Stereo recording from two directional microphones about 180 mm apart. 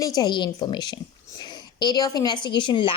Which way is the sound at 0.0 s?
20° left (ahead or behind).